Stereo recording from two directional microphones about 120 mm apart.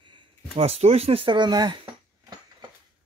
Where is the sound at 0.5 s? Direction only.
60° right (ahead or behind); by 1.9 s 40° right (ahead or behind).